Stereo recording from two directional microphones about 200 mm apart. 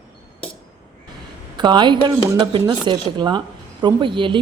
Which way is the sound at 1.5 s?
20° right (ahead or behind).